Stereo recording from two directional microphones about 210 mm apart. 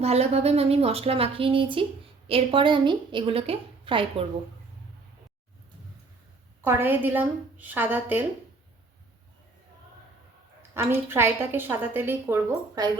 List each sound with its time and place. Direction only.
0.0 s a woman's voice: 30° right (ahead or behind)
6.7 s a woman's voice: 10° right (ahead or behind)
10.8 s a woman's voice: 10° right (ahead or behind)